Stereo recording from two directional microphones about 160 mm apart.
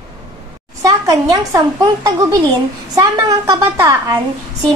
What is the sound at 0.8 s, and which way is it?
A woman's voice, 20° right (ahead or behind).